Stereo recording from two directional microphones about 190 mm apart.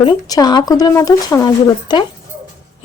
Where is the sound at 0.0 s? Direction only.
25° left (ahead or behind).